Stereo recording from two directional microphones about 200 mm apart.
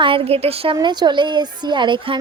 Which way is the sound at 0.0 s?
25° right (ahead or behind).